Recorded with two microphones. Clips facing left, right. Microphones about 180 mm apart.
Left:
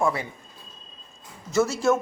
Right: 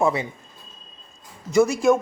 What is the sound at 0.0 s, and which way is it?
Speech, 20° right (ahead or behind).